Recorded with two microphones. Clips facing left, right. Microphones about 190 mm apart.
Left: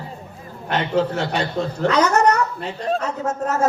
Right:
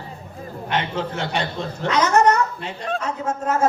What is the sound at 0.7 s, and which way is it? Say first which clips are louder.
A man's voice: left 5 dB; 40° left (ahead or behind).